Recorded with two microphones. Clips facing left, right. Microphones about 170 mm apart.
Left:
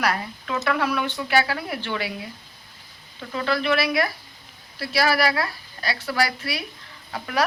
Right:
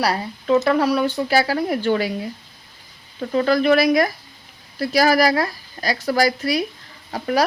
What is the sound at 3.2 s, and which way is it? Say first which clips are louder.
Speech: right 8 dB; 40° right (ahead or behind).